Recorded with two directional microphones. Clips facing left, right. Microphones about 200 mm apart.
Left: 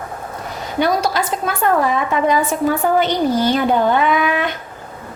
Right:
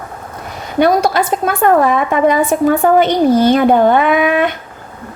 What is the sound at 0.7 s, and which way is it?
A woman's voice, 55° right (ahead or behind).